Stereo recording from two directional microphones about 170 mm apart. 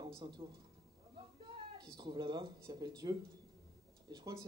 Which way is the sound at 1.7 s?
25° right (ahead or behind).